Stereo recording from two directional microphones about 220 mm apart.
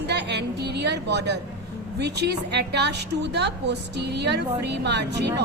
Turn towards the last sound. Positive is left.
turn(degrees=-50)  # may be behind; listen again after turning